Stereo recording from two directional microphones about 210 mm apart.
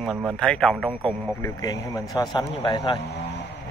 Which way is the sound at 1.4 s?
20° left (ahead or behind).